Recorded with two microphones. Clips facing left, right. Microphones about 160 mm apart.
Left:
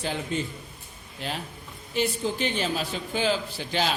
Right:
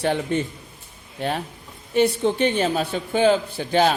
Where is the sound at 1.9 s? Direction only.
70° right (ahead or behind).